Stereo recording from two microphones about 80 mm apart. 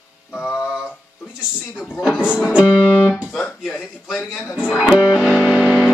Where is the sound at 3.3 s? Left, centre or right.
Centre.